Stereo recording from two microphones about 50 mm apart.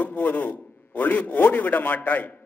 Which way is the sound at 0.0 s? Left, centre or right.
Left.